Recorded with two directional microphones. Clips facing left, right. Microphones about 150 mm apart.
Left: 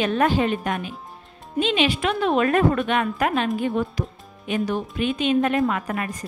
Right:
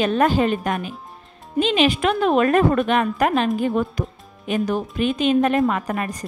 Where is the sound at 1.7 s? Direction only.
45° right (ahead or behind).